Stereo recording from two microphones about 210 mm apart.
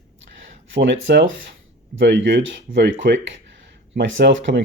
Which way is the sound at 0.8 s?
60° right (ahead or behind).